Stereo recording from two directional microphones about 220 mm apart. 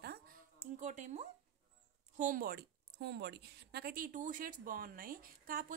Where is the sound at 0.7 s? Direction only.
35° right (ahead or behind).